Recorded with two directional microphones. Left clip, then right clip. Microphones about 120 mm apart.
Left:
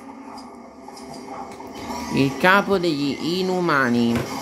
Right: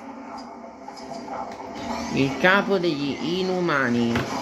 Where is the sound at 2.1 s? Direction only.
30° left (ahead or behind).